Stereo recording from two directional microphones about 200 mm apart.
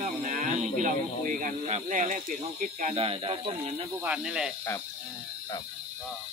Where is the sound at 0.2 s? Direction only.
40° right (ahead or behind).